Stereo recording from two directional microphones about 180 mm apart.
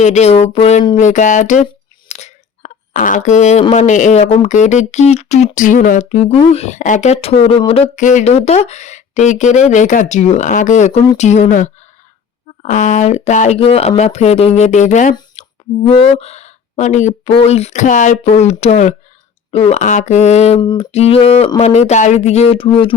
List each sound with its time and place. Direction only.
0.0 s speech: 40° left (ahead or behind)
0.9 s a sound: 40° left (ahead or behind)
1.6 s speech: 40° left (ahead or behind)
15.4 s speech: 30° left (ahead or behind)
20.6 s a sound: 25° left (ahead or behind)
20.9 s speech: 35° left (ahead or behind)